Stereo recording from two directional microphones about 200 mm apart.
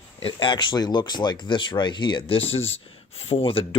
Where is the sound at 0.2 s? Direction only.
25° left (ahead or behind).